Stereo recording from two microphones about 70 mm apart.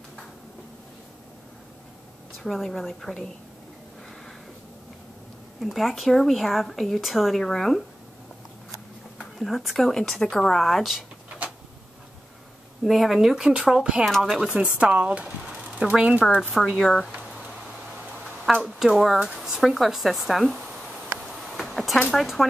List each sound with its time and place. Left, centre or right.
2.3 s speech: centre
5.6 s speech: centre
9.4 s speech: centre
11.2 s a sound: centre
12.8 s speech: centre
14.0 s speech: centre
14.5 s speech: centre
16.7 s speech: centre
18.6 s speech: centre
21.4 s a sound: centre
22.1 s speech: centre